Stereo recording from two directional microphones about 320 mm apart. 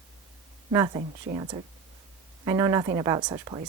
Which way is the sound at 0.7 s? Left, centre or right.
Centre.